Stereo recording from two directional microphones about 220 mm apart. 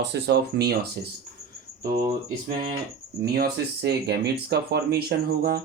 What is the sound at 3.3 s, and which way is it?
Speech, 45° right (ahead or behind).